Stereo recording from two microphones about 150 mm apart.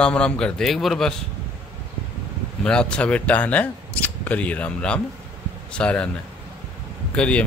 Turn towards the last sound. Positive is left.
turn(degrees=5)  # may be behind; listen again after turning